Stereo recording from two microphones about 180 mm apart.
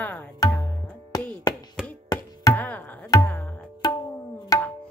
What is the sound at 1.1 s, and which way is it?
Chop, 20° left (ahead or behind).